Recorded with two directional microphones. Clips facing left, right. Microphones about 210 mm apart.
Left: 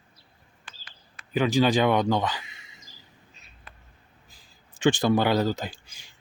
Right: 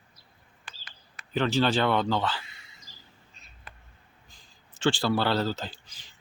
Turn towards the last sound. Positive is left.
turn(degrees=10)  # may be behind; listen again after turning